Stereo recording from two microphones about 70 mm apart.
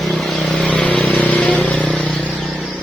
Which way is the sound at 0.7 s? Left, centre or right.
Centre.